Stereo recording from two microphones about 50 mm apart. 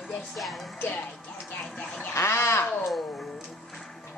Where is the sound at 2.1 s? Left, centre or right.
Left.